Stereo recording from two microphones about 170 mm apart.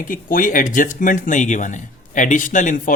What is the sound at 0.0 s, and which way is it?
Speech, 55° left (ahead or behind).